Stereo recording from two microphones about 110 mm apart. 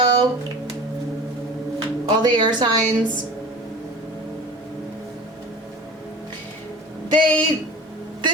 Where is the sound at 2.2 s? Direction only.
45° right (ahead or behind).